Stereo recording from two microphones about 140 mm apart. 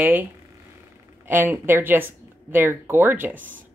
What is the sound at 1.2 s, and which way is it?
Speech, 15° right (ahead or behind).